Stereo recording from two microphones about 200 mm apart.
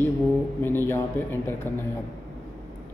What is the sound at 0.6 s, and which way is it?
Mantra, 10° left (ahead or behind).